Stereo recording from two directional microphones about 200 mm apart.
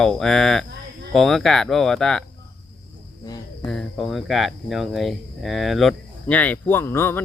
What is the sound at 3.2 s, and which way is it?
Cricket, 20° left (ahead or behind).